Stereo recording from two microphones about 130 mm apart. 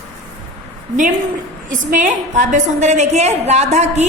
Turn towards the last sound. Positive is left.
turn(degrees=-60)  # may be behind; listen again after turning